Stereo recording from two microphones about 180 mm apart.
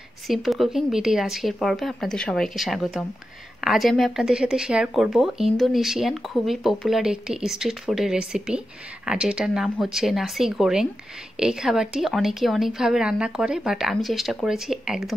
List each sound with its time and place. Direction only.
0.3 s a woman's voice: centre (ahead or behind)